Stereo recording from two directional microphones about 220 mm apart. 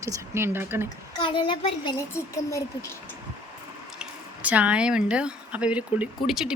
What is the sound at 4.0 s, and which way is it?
Speech, 5° right (ahead or behind).